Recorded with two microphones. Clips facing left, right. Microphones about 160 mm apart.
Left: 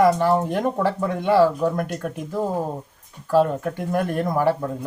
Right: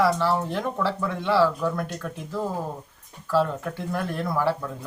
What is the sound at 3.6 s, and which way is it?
Speech, 45° left (ahead or behind).